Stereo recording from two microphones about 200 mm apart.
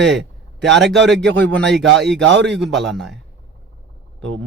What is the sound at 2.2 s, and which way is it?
Speech, 65° right (ahead or behind).